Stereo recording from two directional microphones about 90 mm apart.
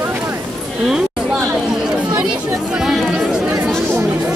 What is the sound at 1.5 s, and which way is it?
Chatter, 5° right (ahead or behind).